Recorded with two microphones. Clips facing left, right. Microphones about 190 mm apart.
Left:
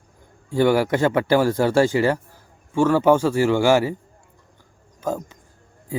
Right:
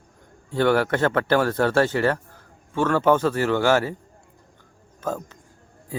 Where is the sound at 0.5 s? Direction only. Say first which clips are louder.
Left 2 dB; 10° left (ahead or behind).